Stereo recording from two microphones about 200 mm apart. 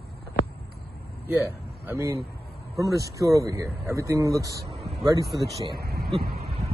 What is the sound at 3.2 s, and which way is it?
Speech, 15° right (ahead or behind).